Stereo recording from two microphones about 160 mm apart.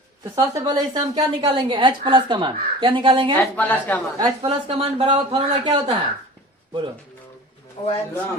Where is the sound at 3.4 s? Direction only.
10° left (ahead or behind).